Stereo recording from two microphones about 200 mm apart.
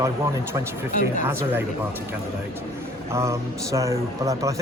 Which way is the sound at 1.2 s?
10° right (ahead or behind).